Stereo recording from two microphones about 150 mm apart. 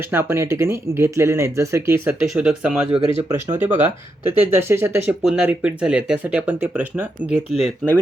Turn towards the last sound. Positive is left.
turn(degrees=-5)  # may be behind; listen again after turning